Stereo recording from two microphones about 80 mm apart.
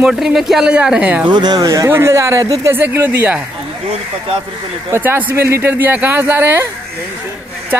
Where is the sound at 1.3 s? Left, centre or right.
Right.